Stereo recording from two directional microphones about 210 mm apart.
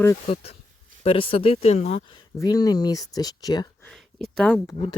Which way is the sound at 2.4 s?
15° left (ahead or behind).